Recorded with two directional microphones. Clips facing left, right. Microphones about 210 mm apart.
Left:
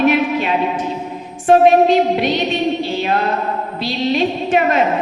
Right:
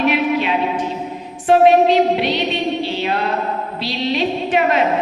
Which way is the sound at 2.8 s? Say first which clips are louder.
Left 2 dB; 45° left (ahead or behind).